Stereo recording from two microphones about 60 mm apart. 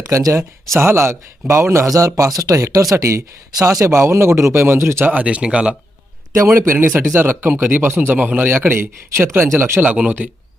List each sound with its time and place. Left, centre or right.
0.0 s speech: right
0.8 s a man's voice: right
2.9 s a man's voice: right
3.9 s a man's voice: right
5.1 s speech: right
6.3 s a man's voice: right
6.7 s a man's voice: right
8.4 s a man's voice: right
9.8 s speech: right